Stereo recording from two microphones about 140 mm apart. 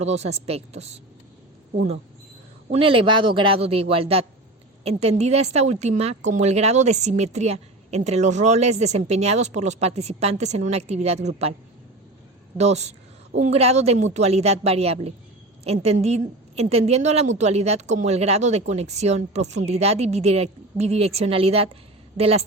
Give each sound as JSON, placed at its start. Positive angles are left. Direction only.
{"t": 0.0, "sound": "a woman's voice", "side_deg": -50}
{"t": 2.7, "sound": "a man's voice", "side_deg": -40}
{"t": 12.5, "sound": "a woman's voice", "side_deg": -50}